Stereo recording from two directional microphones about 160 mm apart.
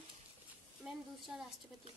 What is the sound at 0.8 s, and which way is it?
Speech, 5° right (ahead or behind).